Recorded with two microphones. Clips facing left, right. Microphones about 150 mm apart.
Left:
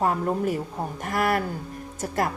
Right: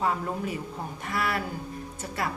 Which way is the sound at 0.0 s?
45° left (ahead or behind).